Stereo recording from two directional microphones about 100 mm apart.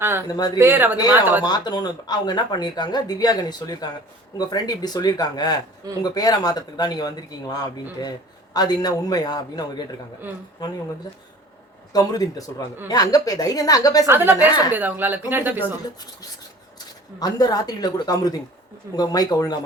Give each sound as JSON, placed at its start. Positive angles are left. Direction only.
{"t": 0.0, "sound": "speech", "side_deg": -25}
{"t": 0.3, "sound": "speech", "side_deg": 40}
{"t": 0.6, "sound": "speech", "side_deg": -20}
{"t": 1.5, "sound": "speech", "side_deg": 45}
{"t": 11.9, "sound": "speech", "side_deg": 35}
{"t": 14.1, "sound": "speech", "side_deg": -20}
{"t": 17.2, "sound": "speech", "side_deg": 40}